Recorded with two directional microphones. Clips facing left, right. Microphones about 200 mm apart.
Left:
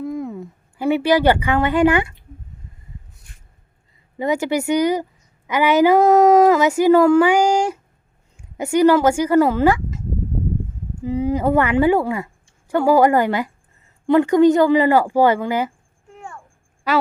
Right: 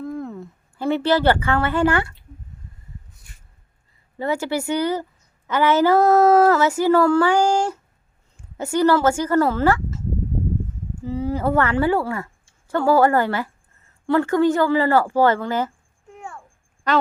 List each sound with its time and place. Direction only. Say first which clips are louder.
0.0 s a sound: left 3 dB; 10° left (ahead or behind)
4.2 s speech: left 3 dB; 15° left (ahead or behind)
11.0 s speech: left 4 dB; 15° left (ahead or behind)
16.9 s speech: left 1 dB; 5° left (ahead or behind)